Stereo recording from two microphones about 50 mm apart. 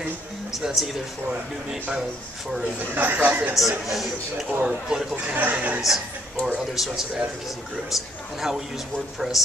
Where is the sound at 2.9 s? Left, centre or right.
Right.